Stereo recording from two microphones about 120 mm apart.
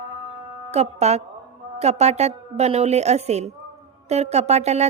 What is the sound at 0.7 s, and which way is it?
A woman's voice, 65° right (ahead or behind).